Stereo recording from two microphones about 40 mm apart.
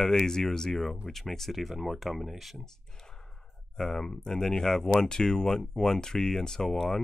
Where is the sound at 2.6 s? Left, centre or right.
Centre.